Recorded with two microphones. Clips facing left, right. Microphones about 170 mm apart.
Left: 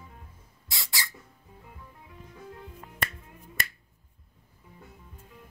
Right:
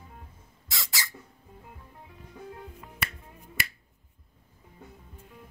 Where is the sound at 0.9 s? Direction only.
20° right (ahead or behind).